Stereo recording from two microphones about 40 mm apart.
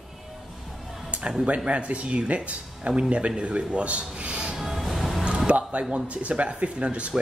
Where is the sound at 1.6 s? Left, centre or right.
Right.